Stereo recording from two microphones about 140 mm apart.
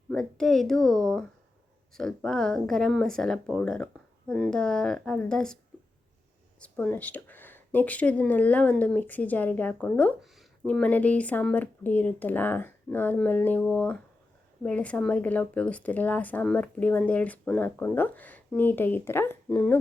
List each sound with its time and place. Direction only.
0.1 s speech: 5° left (ahead or behind)
6.6 s speech: 10° left (ahead or behind)